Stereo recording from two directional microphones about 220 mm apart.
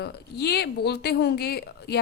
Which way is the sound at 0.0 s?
50° left (ahead or behind).